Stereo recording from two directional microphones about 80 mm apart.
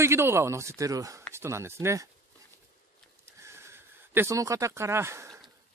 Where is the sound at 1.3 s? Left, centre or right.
Right.